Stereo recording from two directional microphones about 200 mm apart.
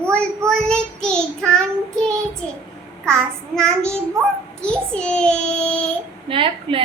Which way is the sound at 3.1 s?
5° left (ahead or behind).